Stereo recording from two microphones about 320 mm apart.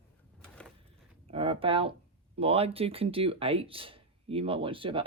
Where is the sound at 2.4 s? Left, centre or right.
Centre.